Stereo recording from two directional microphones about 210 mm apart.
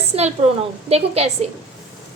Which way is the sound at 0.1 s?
30° right (ahead or behind).